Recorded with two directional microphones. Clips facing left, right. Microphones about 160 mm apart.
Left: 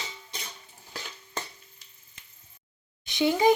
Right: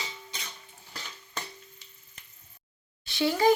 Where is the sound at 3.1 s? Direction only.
20° left (ahead or behind).